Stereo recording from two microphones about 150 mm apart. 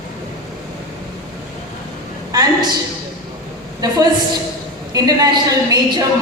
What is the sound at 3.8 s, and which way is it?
A woman's voice, 25° right (ahead or behind).